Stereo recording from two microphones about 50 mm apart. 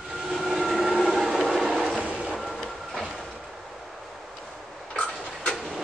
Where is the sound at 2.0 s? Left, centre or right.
Right.